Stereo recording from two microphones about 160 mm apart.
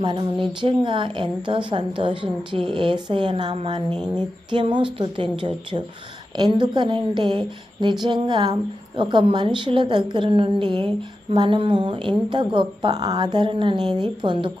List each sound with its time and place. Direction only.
0.0 s a woman's voice: 30° right (ahead or behind)